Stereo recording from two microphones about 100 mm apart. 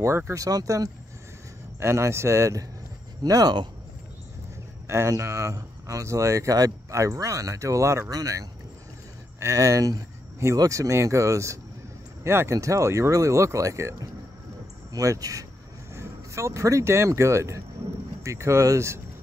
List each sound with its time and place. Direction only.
0.0 s speech: 25° right (ahead or behind)
1.8 s speech: 25° right (ahead or behind)
4.8 s speech: 30° right (ahead or behind)